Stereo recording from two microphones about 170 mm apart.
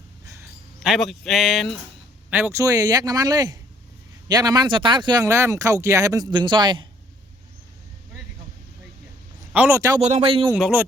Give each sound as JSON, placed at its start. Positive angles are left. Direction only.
{"t": 0.8, "sound": "speech", "side_deg": 0}
{"t": 2.3, "sound": "speech", "side_deg": -15}
{"t": 9.5, "sound": "a man's voice", "side_deg": -10}
{"t": 10.0, "sound": "speech", "side_deg": -40}
{"t": 10.5, "sound": "a man's voice", "side_deg": -10}